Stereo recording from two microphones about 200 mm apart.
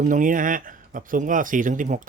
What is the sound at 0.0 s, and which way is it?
Speech, 40° right (ahead or behind).